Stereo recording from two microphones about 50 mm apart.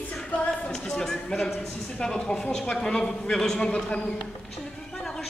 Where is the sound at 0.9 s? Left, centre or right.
Centre.